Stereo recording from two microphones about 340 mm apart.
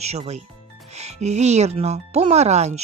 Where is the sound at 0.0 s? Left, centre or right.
Centre.